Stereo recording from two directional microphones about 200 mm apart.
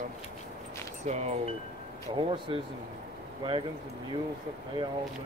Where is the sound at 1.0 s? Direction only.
35° right (ahead or behind).